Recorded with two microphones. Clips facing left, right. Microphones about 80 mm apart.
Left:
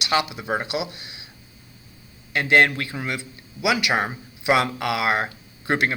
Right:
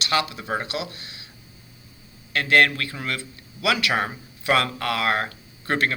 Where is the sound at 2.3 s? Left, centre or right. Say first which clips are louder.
Left 1 dB; centre.